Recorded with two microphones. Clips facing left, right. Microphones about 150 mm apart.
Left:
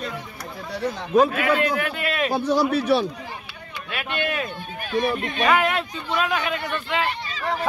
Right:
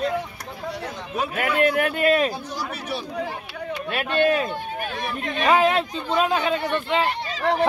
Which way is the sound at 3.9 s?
40° right (ahead or behind).